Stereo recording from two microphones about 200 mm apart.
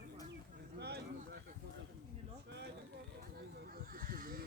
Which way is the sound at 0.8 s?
55° right (ahead or behind).